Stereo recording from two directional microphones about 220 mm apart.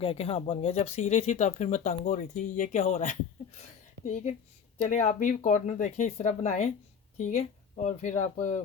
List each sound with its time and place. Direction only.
0.0 s speech: 25° left (ahead or behind)